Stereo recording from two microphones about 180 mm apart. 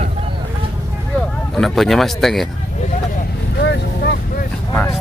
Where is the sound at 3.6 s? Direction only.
70° left (ahead or behind).